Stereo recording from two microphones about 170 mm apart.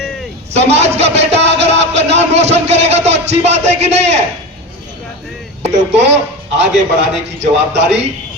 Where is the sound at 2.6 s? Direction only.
40° right (ahead or behind).